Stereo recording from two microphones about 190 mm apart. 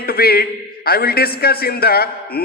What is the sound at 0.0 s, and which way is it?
A man's voice, 55° left (ahead or behind).